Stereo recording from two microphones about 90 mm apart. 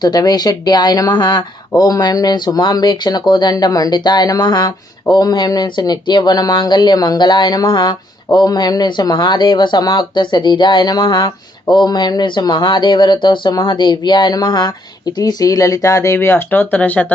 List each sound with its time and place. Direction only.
0.0 s speech: 45° left (ahead or behind); by 17.1 s 15° left (ahead or behind)